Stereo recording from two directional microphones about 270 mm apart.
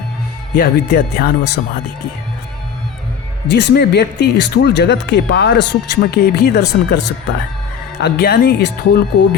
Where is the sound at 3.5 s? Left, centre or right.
Left.